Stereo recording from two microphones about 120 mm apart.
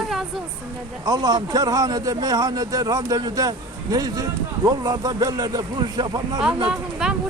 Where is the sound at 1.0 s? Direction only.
35° right (ahead or behind).